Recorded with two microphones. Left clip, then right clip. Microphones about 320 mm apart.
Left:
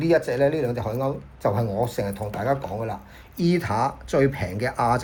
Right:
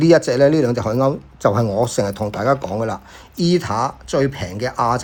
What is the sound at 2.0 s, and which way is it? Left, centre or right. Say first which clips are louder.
Speech: right 7 dB; right.